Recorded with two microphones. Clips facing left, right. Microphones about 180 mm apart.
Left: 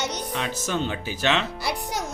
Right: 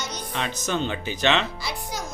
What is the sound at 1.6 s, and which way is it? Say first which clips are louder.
Music: left 4 dB; 65° left (ahead or behind).